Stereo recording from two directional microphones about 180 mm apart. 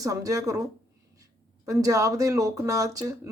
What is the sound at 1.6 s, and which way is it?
Speech, 20° right (ahead or behind).